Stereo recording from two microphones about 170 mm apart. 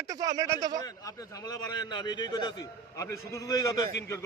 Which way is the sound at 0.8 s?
20° left (ahead or behind).